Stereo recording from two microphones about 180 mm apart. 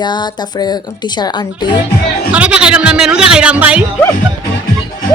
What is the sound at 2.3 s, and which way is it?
Speech, 5° right (ahead or behind).